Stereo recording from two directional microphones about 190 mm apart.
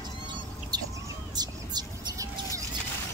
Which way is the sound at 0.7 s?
20° right (ahead or behind).